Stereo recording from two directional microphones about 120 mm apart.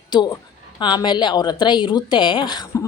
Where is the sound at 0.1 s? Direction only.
40° left (ahead or behind).